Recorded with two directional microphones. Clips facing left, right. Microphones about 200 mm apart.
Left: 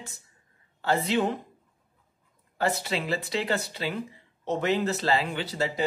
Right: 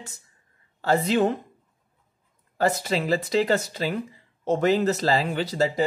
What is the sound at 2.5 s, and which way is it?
Speech, 45° right (ahead or behind).